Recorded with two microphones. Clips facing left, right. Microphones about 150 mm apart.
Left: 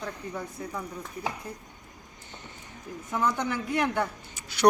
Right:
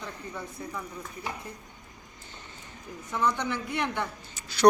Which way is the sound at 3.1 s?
45° left (ahead or behind).